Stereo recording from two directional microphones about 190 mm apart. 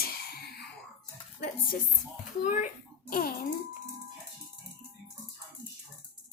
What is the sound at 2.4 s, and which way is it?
Speech, 40° left (ahead or behind).